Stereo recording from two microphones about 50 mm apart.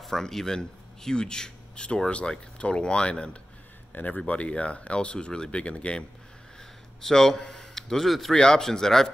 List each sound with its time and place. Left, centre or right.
0.0 s a man's voice: centre; by 6.0 s left
7.0 s a man's voice: centre